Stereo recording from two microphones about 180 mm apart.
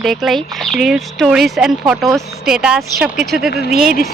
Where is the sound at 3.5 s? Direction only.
60° left (ahead or behind).